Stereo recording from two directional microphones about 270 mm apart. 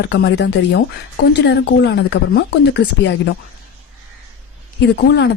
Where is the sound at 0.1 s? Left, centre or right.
Left.